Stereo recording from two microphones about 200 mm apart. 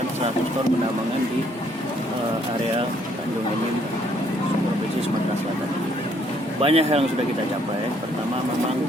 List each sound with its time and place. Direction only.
6.6 s speech: 30° right (ahead or behind)